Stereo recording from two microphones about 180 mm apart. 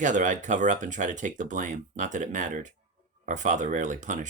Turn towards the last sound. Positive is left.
turn(degrees=-45)  # may be behind; listen again after turning